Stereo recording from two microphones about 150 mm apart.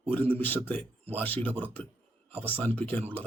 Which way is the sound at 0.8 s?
40° right (ahead or behind).